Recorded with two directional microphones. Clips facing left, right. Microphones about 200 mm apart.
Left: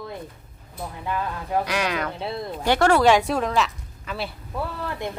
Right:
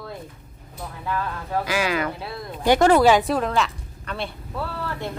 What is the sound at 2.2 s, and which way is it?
Speech, 25° left (ahead or behind).